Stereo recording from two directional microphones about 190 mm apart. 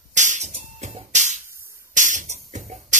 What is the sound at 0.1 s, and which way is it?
Music, 40° right (ahead or behind).